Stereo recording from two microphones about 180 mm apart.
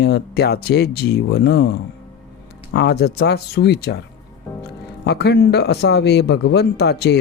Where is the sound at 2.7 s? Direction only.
70° left (ahead or behind).